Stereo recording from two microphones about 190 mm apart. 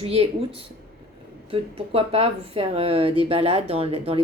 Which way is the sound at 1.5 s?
30° right (ahead or behind).